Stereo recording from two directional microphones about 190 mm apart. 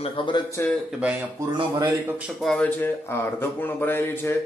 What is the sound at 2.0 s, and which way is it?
A man's voice, 5° right (ahead or behind).